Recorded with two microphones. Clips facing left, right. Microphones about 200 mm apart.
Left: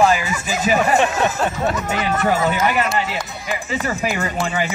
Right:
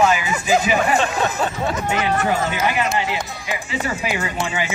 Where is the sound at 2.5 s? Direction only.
45° left (ahead or behind).